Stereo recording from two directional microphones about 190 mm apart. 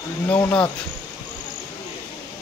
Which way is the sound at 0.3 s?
10° left (ahead or behind).